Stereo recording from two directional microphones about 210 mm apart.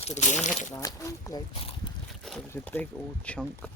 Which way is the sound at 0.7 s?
15° left (ahead or behind).